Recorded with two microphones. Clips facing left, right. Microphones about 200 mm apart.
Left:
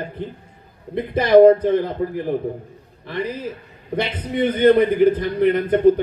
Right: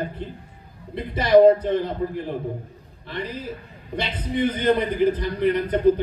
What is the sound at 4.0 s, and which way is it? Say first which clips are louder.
A man's voice: left 3 dB; 60° left (ahead or behind).